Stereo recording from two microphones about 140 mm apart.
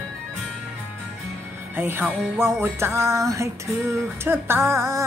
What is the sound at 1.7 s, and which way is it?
Music, 15° right (ahead or behind).